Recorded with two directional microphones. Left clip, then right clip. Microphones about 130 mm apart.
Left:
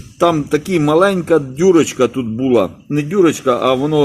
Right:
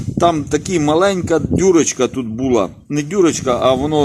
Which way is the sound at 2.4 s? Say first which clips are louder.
Left 2 dB; 30° right (ahead or behind).